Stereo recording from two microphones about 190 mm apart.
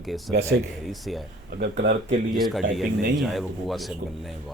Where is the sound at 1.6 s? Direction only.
65° right (ahead or behind).